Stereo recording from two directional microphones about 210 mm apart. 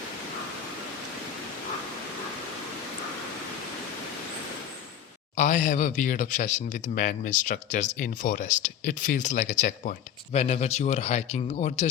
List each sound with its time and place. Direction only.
5.4 s speech: 35° left (ahead or behind)